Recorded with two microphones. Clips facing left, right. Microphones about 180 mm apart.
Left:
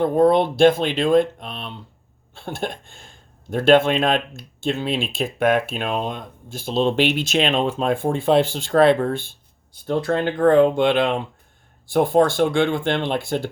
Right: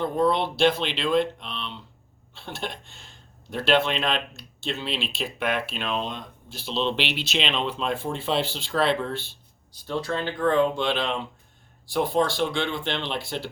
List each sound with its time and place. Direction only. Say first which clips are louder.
0.0 s speech: left 7 dB; 50° left (ahead or behind)